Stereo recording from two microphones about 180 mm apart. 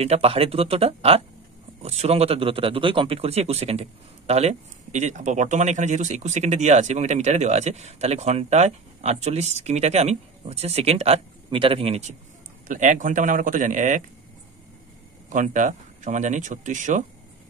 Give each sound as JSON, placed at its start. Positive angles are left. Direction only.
{"t": 0.0, "sound": "a man's voice", "side_deg": -35}
{"t": 12.6, "sound": "speech", "side_deg": -45}
{"t": 15.2, "sound": "speech", "side_deg": -45}